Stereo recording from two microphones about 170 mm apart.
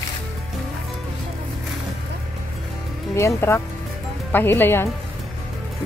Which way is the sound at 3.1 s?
15° left (ahead or behind).